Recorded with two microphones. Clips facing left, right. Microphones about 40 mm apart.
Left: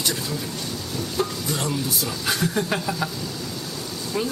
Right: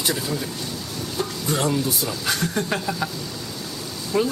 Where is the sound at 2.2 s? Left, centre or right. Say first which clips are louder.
Left 1 dB; centre.